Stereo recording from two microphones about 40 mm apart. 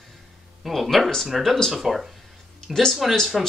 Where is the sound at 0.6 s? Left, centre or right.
Centre.